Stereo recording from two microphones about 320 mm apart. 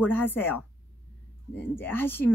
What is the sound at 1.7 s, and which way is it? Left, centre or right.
Speech, centre.